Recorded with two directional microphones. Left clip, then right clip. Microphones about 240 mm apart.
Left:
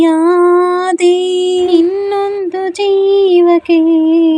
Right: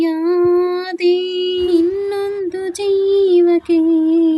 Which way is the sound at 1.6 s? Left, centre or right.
Centre.